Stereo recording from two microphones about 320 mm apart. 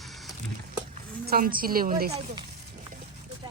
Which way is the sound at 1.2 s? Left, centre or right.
Right.